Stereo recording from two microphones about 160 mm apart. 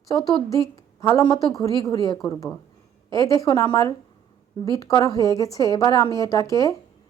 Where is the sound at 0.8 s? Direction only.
20° left (ahead or behind).